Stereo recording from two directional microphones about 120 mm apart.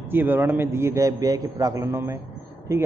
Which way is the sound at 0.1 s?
15° right (ahead or behind).